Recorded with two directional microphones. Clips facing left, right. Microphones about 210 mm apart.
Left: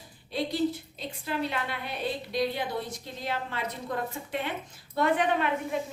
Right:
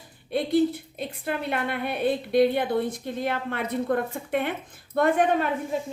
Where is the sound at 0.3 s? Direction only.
55° right (ahead or behind).